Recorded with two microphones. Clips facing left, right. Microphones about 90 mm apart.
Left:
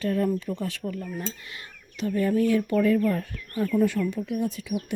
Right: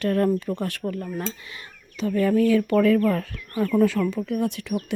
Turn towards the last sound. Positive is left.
turn(degrees=-70)  # may be behind; listen again after turning